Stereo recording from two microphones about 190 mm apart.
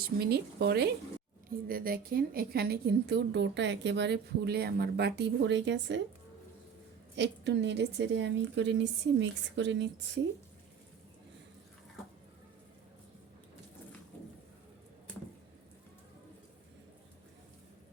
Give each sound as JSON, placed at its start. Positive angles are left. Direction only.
{"t": 0.2, "sound": "a woman's voice", "side_deg": -55}
{"t": 7.2, "sound": "a woman's voice", "side_deg": -65}